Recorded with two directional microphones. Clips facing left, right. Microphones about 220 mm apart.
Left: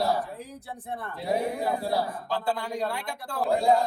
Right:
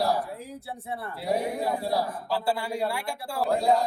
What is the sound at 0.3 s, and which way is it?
Speech, 15° left (ahead or behind).